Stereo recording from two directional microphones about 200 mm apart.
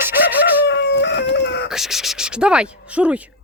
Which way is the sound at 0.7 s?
60° left (ahead or behind).